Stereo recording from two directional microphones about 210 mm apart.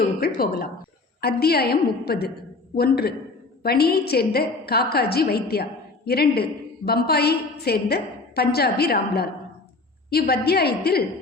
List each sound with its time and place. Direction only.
0.0 s a woman's voice: 45° left (ahead or behind)